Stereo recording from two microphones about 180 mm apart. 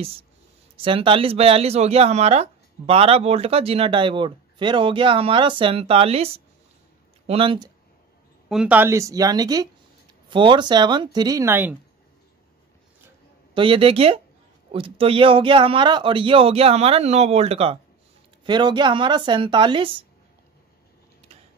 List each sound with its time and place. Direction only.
0.8 s speech: 30° right (ahead or behind)
8.5 s a woman's voice: 5° right (ahead or behind)
13.6 s speech: 30° right (ahead or behind)